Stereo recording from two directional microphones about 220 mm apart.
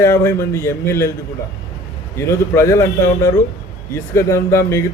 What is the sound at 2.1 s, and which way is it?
A man's voice, 10° left (ahead or behind).